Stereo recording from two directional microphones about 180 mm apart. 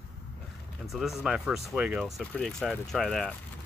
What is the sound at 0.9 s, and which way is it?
Speech, centre (ahead or behind).